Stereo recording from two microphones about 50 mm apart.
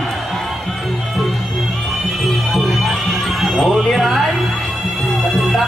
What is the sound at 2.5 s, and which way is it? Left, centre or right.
Music, centre.